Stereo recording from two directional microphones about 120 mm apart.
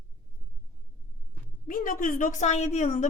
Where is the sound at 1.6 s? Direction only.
90° left; by 3.1 s 75° left (ahead or behind).